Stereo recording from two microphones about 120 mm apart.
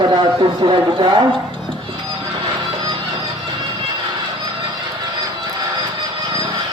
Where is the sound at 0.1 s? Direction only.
40° right (ahead or behind).